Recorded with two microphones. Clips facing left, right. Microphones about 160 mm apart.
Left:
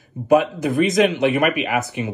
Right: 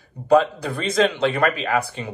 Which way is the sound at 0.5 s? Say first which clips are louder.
Left 4 dB; 20° left (ahead or behind).